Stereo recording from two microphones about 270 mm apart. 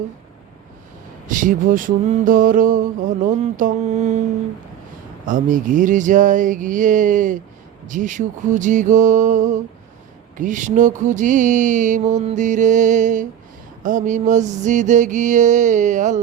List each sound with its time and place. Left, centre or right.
1.3 s mantra: right
5.2 s mantra: right